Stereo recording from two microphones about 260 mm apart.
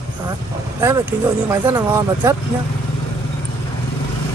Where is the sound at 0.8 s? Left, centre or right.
Centre.